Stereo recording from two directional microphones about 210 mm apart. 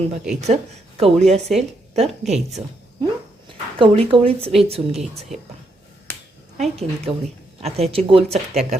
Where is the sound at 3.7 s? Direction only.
25° right (ahead or behind).